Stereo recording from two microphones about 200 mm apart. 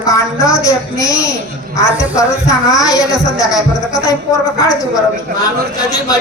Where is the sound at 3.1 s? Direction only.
Centre (ahead or behind).